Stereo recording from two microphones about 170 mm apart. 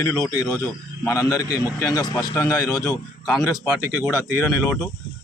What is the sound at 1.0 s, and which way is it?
A man's voice, 15° left (ahead or behind).